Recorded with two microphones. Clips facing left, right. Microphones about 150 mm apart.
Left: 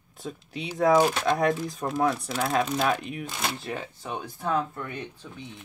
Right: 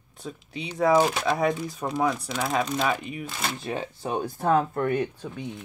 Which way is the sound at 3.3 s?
10° left (ahead or behind).